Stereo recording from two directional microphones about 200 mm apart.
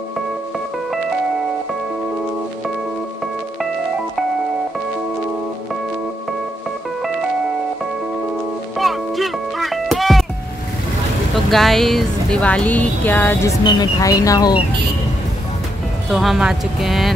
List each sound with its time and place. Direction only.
8.7 s music: centre (ahead or behind)
11.5 s speech: centre (ahead or behind); by 14.5 s 15° left (ahead or behind)
16.1 s speech: centre (ahead or behind)